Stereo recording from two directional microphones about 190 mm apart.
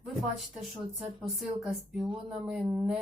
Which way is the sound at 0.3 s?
Centre (ahead or behind).